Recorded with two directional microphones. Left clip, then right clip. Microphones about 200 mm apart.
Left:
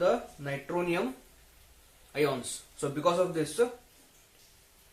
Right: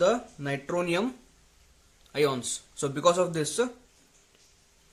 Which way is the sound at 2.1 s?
50° right (ahead or behind).